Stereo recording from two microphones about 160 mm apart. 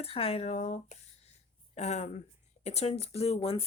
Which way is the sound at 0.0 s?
35° left (ahead or behind).